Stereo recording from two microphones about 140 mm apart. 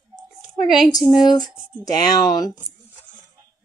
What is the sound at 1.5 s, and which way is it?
Speech, 10° right (ahead or behind).